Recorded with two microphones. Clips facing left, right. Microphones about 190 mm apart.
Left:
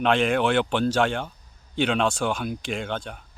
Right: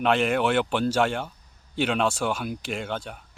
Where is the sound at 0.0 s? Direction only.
5° right (ahead or behind).